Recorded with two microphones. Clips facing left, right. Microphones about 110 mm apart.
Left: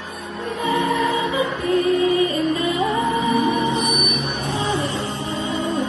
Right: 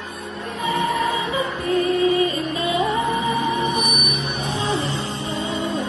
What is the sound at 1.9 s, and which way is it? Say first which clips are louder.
Music: even; 25° left (ahead or behind).